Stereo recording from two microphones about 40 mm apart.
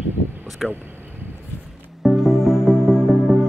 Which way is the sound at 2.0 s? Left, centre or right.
Centre.